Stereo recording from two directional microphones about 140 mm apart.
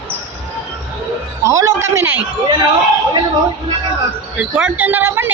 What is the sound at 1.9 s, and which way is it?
Speech, 15° right (ahead or behind).